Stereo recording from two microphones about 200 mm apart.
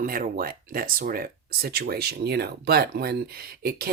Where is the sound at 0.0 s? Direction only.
45° right (ahead or behind).